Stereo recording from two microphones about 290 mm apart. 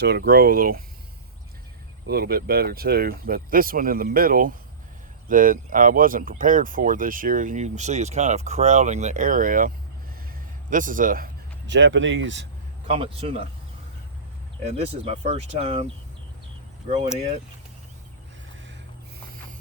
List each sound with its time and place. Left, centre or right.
0.0 s speech: right
2.0 s speech: right
12.9 s speech: centre
14.7 s speech: right
16.9 s speech: centre